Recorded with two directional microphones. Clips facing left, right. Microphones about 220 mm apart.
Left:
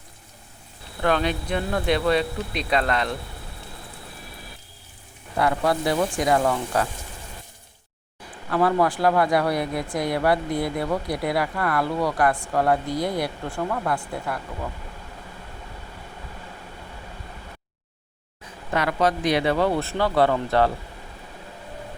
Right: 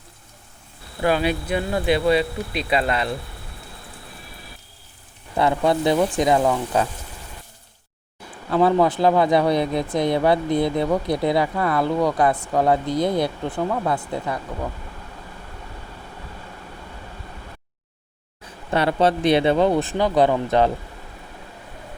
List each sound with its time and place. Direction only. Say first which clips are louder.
1.0 s speech: right 2 dB; 10° right (ahead or behind)
5.4 s speech: right 3 dB; 25° right (ahead or behind)
8.4 s speech: right 3 dB; 25° right (ahead or behind)
18.7 s speech: right 4 dB; 30° right (ahead or behind)